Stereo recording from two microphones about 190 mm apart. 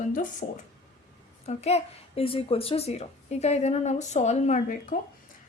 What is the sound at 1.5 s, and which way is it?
Speech, 35° left (ahead or behind).